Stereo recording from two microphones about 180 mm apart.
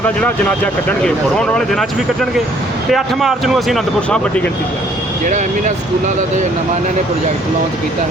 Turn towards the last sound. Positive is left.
turn(degrees=-45)  # may be behind; listen again after turning